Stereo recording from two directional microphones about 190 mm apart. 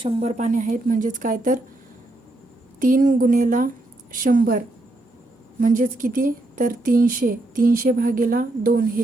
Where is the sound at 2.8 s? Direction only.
45° right (ahead or behind).